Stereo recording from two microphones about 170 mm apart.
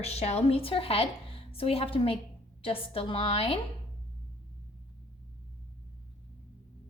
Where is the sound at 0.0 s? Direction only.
40° left (ahead or behind).